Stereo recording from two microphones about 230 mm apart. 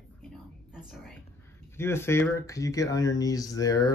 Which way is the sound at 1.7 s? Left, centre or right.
Centre.